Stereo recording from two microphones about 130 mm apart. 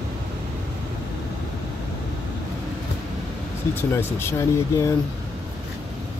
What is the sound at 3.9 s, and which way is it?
Speech, 20° left (ahead or behind).